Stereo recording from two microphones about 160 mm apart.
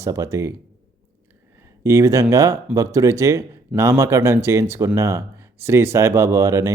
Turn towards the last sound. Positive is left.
turn(degrees=-20)  # may be behind; listen again after turning